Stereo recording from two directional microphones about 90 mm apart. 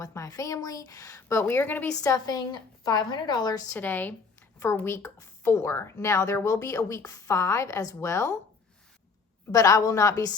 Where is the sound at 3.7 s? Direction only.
20° left (ahead or behind).